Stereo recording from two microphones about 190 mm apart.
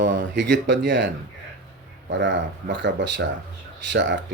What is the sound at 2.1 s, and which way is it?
Speech, 70° right (ahead or behind).